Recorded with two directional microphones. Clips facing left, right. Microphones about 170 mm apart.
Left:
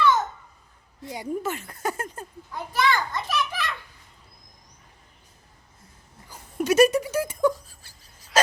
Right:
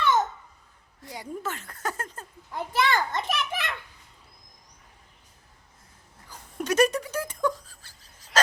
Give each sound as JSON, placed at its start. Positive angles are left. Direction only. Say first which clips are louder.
{"t": 1.0, "sound": "speech", "louder": "left 5 dB", "side_deg": 15}
{"t": 2.5, "sound": "a child's voice", "louder": "left 1 dB", "side_deg": -25}
{"t": 6.3, "sound": "a sound", "louder": "left 4 dB", "side_deg": 5}